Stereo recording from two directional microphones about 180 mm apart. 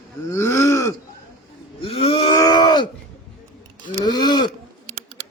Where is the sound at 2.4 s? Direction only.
20° left (ahead or behind).